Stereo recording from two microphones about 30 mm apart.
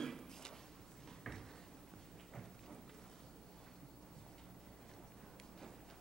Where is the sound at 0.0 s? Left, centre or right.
Centre.